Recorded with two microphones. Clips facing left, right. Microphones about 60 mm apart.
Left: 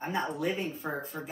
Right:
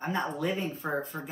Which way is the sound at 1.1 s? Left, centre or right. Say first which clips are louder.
Right 1 dB; centre.